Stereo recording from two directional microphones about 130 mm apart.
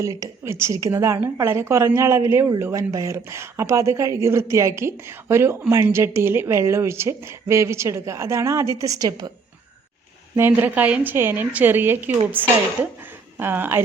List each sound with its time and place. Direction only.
0.0 s a woman's voice: 25° right (ahead or behind)
10.3 s a woman's voice: 15° right (ahead or behind)